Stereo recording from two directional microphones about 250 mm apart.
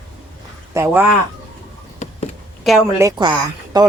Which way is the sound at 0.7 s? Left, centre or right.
Centre.